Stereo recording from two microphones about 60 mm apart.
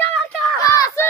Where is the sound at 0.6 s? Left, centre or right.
Left.